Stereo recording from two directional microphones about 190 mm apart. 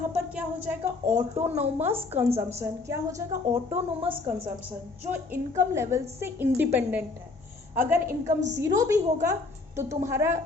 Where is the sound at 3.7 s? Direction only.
30° right (ahead or behind).